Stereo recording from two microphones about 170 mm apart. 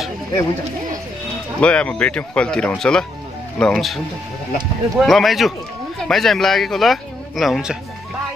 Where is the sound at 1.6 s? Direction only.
5° left (ahead or behind).